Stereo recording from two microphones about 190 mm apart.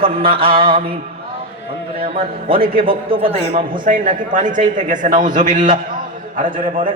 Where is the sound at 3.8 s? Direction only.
45° right (ahead or behind).